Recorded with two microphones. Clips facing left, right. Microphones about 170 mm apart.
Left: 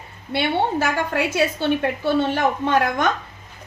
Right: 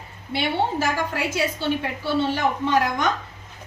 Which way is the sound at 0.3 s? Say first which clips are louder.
Left 3 dB; 60° left (ahead or behind).